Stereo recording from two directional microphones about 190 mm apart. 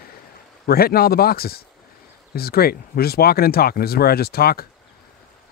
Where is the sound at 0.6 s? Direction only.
55° left (ahead or behind).